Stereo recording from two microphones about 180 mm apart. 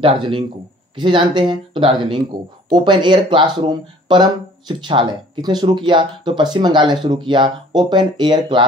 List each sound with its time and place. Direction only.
0.0 s speech: 30° right (ahead or behind)